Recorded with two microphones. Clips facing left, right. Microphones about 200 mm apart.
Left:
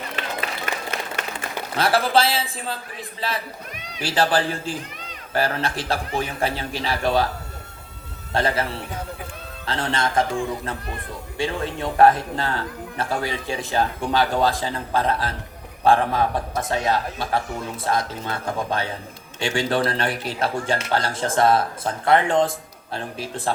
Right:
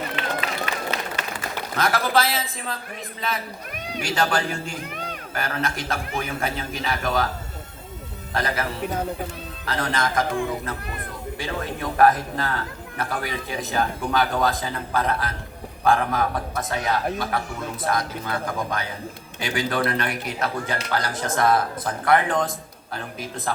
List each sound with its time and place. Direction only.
0.6 s applause: 50° left (ahead or behind)
1.7 s a man's voice: 30° left (ahead or behind)
8.3 s a man's voice: 30° left (ahead or behind)
9.6 s a man's voice: 30° left (ahead or behind)